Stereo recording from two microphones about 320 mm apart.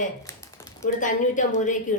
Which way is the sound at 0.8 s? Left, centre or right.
Left.